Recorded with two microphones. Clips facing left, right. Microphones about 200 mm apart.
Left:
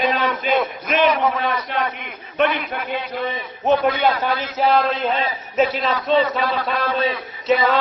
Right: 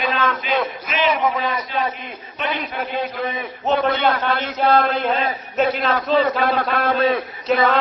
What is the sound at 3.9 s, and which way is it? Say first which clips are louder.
Speech: even; 60° right (ahead or behind).